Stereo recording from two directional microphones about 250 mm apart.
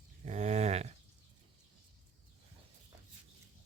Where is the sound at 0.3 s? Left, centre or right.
Right.